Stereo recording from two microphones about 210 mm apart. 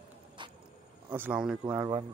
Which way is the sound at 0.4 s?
20° right (ahead or behind).